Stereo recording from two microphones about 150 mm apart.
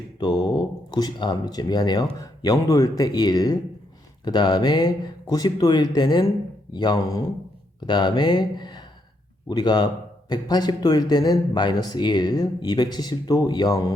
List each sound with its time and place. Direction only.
0.2 s a man's voice: 25° left (ahead or behind)